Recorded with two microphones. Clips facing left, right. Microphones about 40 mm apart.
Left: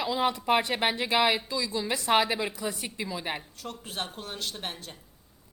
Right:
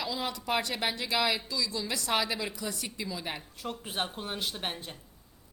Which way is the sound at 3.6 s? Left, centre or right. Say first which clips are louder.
Right 4 dB; centre.